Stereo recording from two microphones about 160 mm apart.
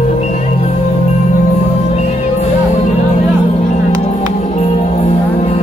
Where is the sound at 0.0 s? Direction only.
45° left (ahead or behind).